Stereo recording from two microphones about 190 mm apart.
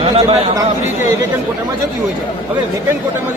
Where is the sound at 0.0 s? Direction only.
30° right (ahead or behind).